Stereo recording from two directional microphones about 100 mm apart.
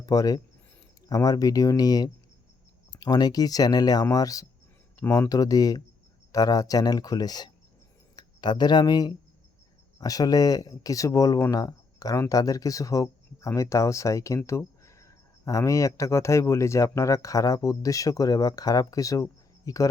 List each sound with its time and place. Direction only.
0.0 s speech: 35° left (ahead or behind)